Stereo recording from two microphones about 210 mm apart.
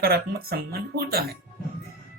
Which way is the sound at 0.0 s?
45° right (ahead or behind).